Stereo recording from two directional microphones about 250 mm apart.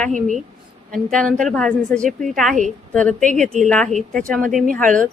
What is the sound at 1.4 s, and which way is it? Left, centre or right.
A woman's voice, centre.